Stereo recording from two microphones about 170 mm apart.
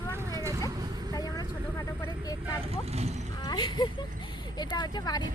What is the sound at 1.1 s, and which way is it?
Speech, 20° left (ahead or behind).